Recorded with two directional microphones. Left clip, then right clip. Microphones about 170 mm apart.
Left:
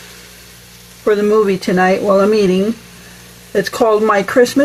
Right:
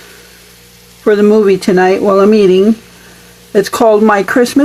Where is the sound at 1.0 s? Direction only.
80° right.